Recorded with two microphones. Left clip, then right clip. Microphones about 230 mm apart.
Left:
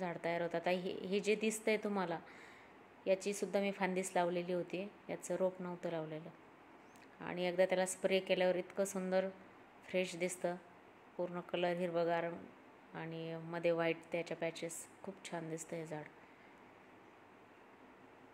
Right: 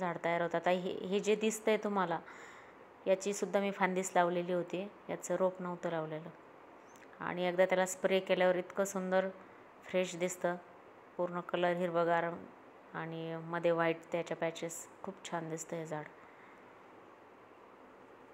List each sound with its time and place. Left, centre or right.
0.0 s a woman's voice: centre